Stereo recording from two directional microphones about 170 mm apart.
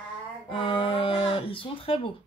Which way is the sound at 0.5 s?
30° left (ahead or behind).